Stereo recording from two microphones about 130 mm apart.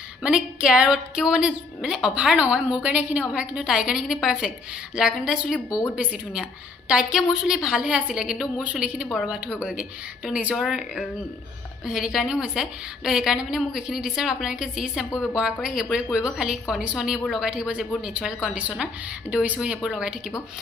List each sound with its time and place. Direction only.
0.2 s a woman's voice: 5° right (ahead or behind)
5.7 s a woman's voice: 30° left (ahead or behind)
6.9 s a woman's voice: 5° right (ahead or behind)